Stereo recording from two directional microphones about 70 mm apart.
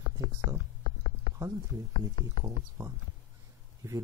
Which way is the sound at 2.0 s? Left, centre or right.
Right.